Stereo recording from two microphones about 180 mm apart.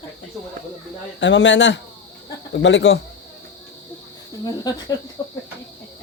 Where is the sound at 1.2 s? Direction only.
90° left.